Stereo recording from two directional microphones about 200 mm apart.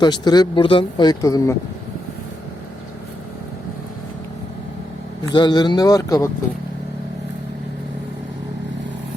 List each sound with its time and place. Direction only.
0.0 s speech: 20° left (ahead or behind)
5.3 s speech: 20° left (ahead or behind)